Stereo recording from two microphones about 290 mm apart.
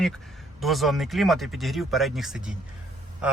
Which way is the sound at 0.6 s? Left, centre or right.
Centre.